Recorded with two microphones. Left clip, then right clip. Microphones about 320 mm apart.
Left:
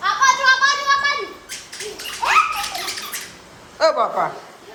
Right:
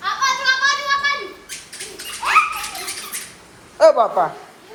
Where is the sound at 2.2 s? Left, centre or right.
Left.